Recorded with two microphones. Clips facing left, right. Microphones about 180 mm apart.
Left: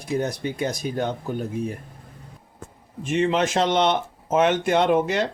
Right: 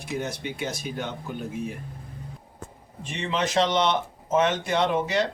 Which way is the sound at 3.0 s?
50° left (ahead or behind).